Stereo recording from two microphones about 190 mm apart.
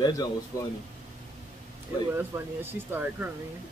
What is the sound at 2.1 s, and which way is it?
Speech, 10° right (ahead or behind).